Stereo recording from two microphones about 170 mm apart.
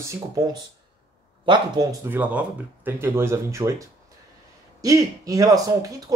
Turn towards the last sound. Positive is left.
turn(degrees=-20)  # may be behind; listen again after turning